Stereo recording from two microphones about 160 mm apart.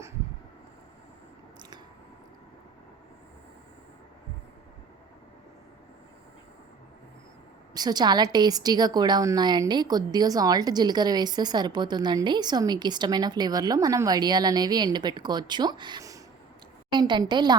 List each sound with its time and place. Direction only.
7.7 s a woman's voice: 25° right (ahead or behind)